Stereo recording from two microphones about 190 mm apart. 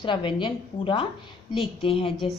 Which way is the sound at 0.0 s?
25° left (ahead or behind).